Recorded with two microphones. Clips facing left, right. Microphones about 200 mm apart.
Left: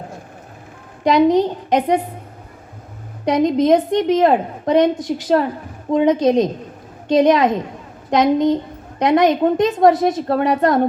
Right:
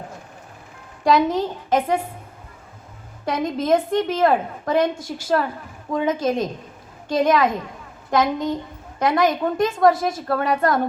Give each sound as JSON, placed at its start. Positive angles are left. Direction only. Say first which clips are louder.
{"t": 1.0, "sound": "a woman's voice", "louder": "left 5 dB", "side_deg": 20}
{"t": 3.2, "sound": "a woman's voice", "louder": "left 7 dB", "side_deg": 20}